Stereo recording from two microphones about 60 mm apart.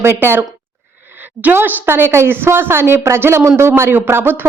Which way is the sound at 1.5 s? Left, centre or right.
Right.